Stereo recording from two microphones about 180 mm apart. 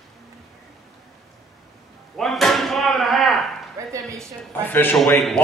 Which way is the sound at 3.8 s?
15° right (ahead or behind).